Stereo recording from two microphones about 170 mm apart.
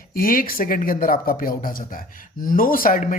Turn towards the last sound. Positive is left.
turn(degrees=55)  # may be behind; listen again after turning